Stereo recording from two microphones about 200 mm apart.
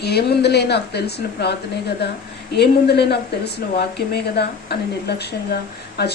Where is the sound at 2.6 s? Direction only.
55° left (ahead or behind).